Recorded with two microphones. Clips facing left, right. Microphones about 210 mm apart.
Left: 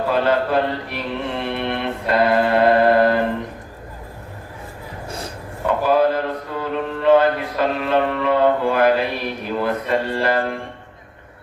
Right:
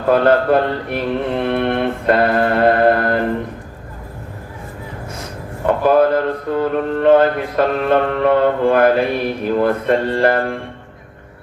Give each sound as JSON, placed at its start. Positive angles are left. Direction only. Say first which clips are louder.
{"t": 0.1, "sound": "speech", "louder": "right 7 dB", "side_deg": -50}
{"t": 5.6, "sound": "speech", "louder": "right 4 dB", "side_deg": -55}